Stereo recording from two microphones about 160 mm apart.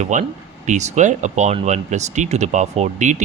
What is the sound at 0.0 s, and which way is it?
Speech, 50° right (ahead or behind).